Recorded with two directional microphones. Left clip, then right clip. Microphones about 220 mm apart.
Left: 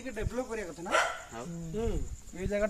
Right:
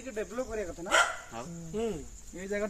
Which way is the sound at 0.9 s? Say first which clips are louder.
Right 3 dB; 30° right (ahead or behind).